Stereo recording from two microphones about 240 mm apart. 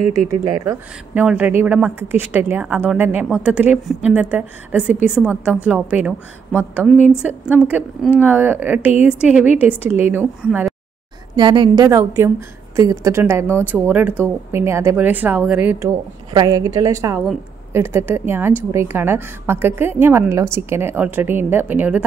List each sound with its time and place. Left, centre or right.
0.3 s a woman's voice: centre
11.3 s a woman's voice: centre